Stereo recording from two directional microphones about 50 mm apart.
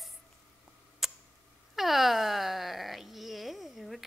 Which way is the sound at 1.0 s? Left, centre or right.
Centre.